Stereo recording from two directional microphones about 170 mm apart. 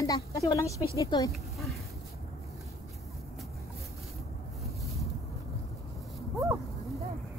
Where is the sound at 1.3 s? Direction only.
Centre (ahead or behind).